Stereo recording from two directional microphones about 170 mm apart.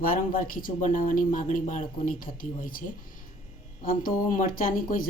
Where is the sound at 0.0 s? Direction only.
55° left (ahead or behind).